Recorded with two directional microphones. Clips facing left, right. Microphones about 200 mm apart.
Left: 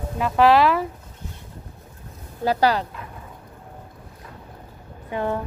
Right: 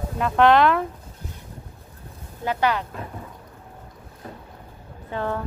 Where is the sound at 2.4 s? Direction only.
35° left (ahead or behind).